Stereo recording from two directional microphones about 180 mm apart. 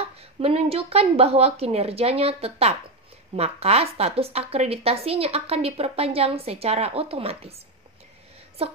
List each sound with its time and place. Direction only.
0.2 s a woman's voice: 35° right (ahead or behind)